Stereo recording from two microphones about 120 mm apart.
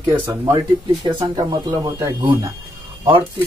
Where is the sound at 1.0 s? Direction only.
40° right (ahead or behind).